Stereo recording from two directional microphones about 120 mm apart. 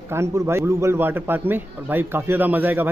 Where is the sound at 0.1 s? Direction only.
20° right (ahead or behind).